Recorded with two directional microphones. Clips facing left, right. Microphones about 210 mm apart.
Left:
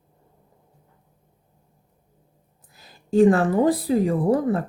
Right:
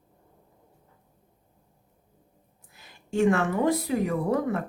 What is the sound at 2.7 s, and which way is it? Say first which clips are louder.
A woman's voice: left 8 dB; 35° left (ahead or behind).